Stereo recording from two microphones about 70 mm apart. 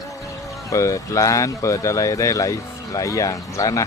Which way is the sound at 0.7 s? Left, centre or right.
Left.